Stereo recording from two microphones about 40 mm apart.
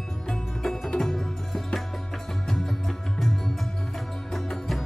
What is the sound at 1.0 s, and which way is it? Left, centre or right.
Music, centre.